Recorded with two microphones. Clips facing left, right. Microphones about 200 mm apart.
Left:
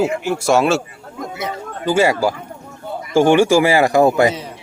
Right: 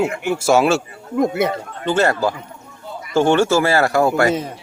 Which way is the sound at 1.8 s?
10° left (ahead or behind).